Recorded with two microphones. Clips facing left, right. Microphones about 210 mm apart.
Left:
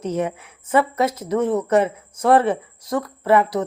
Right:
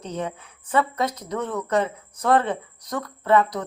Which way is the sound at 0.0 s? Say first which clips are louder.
Left 7 dB; 80° left.